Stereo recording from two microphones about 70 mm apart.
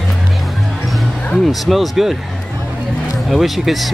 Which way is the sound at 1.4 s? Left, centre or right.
Centre.